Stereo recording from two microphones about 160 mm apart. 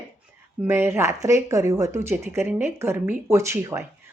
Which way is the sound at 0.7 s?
15° right (ahead or behind).